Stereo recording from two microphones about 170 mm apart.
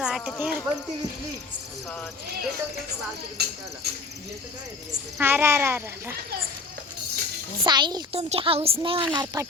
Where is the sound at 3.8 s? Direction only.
70° right (ahead or behind).